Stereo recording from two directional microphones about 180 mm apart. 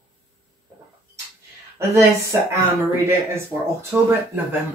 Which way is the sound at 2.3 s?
15° right (ahead or behind).